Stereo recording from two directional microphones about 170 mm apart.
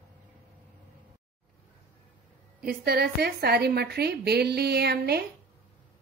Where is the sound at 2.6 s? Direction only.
60° right (ahead or behind).